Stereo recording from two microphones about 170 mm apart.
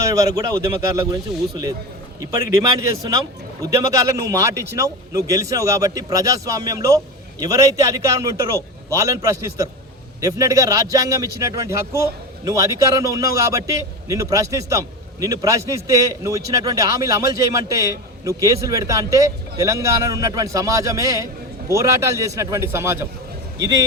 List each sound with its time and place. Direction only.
0.0 s a man's voice: 20° right (ahead or behind)
2.2 s a man's voice: 20° right (ahead or behind)